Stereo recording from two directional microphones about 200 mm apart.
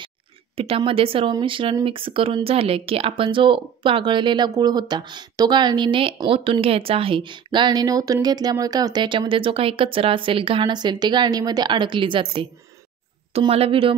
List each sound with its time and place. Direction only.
0.6 s speech: 25° right (ahead or behind)